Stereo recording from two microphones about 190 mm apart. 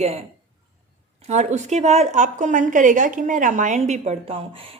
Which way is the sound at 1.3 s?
35° right (ahead or behind).